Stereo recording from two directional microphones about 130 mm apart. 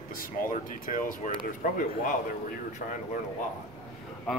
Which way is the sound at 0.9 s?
80° left.